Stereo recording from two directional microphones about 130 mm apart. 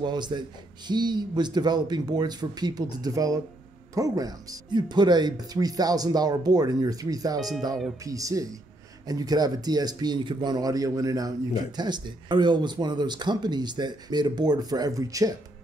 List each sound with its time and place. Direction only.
0.0 s speech: 35° right (ahead or behind)